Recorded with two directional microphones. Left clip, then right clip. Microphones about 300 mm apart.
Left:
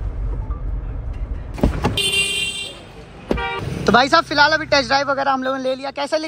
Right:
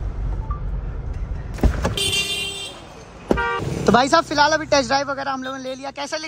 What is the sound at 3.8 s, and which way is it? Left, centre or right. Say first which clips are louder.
A man's voice: left 2 dB; centre.